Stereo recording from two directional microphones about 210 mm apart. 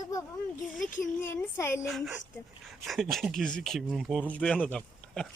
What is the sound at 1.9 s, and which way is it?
Speech, centre (ahead or behind).